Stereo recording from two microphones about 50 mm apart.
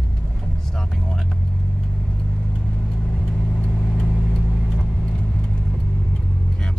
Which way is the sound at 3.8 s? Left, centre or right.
Centre.